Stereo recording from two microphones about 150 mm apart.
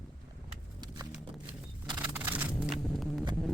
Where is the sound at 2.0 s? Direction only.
10° right (ahead or behind).